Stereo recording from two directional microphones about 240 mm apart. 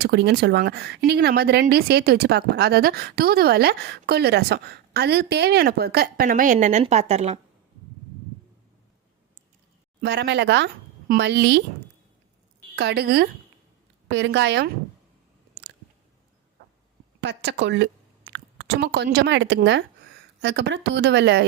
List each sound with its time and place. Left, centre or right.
0.0 s speech: right
10.0 s a woman's voice: right
12.7 s a woman's voice: right
17.2 s a woman's voice: right